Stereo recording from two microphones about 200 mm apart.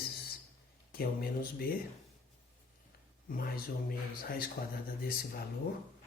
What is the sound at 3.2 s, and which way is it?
Speech, 45° left (ahead or behind).